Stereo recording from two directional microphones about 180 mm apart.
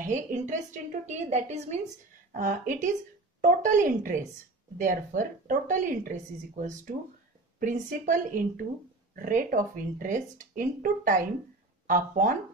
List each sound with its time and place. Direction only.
0.0 s a woman's voice: 45° right (ahead or behind)